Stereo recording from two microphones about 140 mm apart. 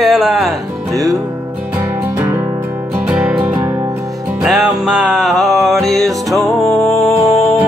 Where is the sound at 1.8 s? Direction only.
15° right (ahead or behind).